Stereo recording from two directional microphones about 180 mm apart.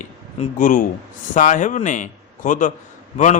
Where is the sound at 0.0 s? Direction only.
45° left (ahead or behind).